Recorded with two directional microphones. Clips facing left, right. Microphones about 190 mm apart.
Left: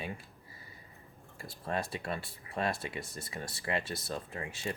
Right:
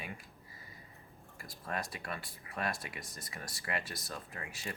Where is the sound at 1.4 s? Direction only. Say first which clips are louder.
Left 4 dB; 25° left (ahead or behind).